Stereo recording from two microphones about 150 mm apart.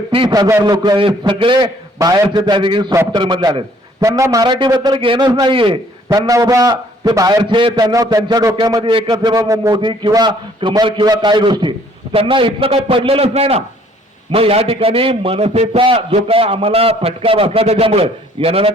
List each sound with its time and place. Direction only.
0.1 s a man's voice: 30° right (ahead or behind)